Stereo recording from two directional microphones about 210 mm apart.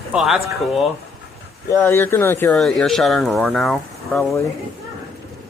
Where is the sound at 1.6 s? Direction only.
10° left (ahead or behind).